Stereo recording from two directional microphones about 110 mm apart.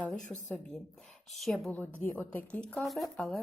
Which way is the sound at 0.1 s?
15° left (ahead or behind).